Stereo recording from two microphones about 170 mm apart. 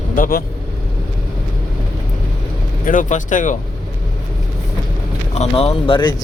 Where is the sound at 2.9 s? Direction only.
50° left (ahead or behind).